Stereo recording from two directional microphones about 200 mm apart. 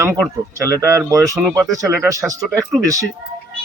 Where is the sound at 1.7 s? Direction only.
15° right (ahead or behind).